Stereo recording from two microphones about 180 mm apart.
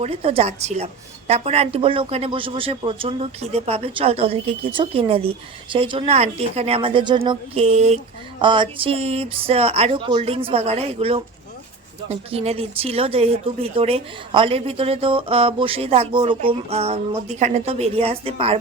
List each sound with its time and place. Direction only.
0.0 s speech: 30° right (ahead or behind)